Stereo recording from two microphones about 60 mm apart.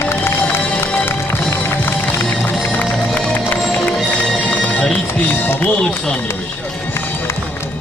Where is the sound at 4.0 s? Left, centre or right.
Centre.